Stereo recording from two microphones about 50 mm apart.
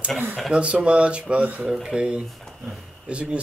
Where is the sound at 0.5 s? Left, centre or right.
Right.